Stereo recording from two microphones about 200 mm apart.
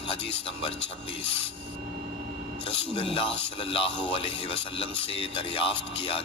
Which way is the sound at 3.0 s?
25° left (ahead or behind).